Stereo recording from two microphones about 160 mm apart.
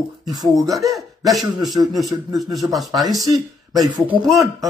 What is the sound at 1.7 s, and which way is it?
Speech, 25° right (ahead or behind).